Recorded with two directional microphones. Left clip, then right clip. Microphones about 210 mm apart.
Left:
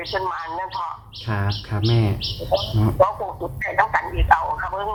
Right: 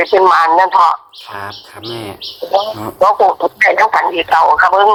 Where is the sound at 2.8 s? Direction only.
45° right (ahead or behind).